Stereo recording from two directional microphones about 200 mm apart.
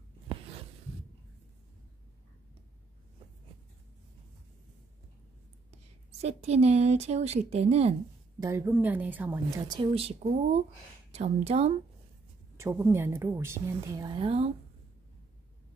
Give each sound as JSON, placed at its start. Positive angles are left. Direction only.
{"t": 0.3, "sound": "a sound", "side_deg": -25}
{"t": 6.2, "sound": "speech", "side_deg": -30}
{"t": 8.4, "sound": "a woman's voice", "side_deg": -15}
{"t": 9.6, "sound": "speech", "side_deg": -20}
{"t": 12.5, "sound": "a woman's voice", "side_deg": -15}